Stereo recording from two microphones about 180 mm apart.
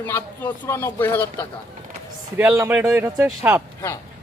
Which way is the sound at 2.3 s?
15° right (ahead or behind).